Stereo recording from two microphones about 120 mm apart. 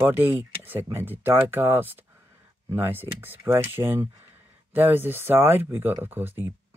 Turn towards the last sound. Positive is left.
turn(degrees=-15)  # may be behind; listen again after turning